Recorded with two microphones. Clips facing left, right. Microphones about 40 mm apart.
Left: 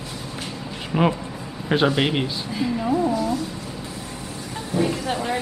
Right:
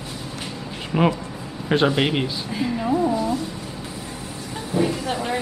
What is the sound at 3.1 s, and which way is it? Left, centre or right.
Speech, centre.